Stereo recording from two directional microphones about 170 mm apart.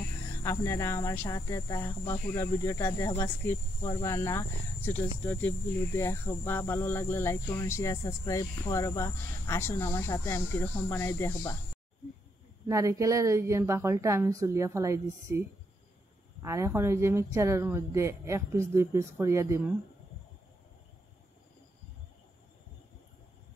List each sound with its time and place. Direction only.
0.3 s speech: 15° left (ahead or behind)
12.6 s speech: 20° right (ahead or behind)
16.4 s speech: 15° right (ahead or behind)